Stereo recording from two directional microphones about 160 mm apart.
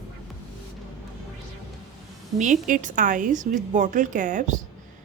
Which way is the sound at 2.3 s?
50° right (ahead or behind).